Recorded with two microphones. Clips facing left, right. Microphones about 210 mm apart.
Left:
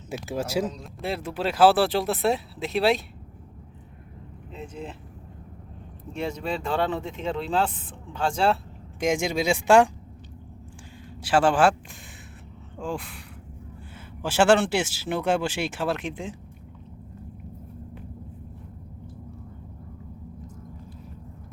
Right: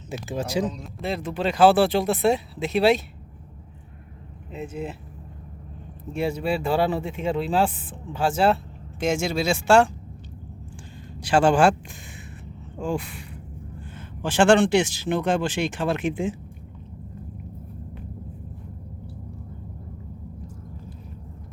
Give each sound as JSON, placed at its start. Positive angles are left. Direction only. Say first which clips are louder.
{"t": 0.1, "sound": "speech", "louder": "even", "side_deg": 10}
{"t": 4.5, "sound": "speech", "louder": "right 5 dB", "side_deg": -5}
{"t": 6.1, "sound": "speech", "louder": "right 5 dB", "side_deg": -10}
{"t": 9.0, "sound": "speech", "louder": "right 1 dB", "side_deg": 15}
{"t": 11.2, "sound": "speech", "louder": "right 2 dB", "side_deg": 5}
{"t": 12.8, "sound": "speech", "louder": "right 4 dB", "side_deg": 0}